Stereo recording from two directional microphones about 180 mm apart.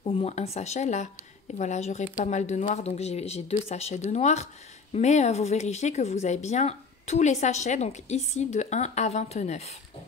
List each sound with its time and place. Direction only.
0.0 s speech: 35° left (ahead or behind)